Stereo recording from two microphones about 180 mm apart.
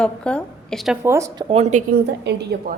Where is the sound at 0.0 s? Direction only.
5° left (ahead or behind).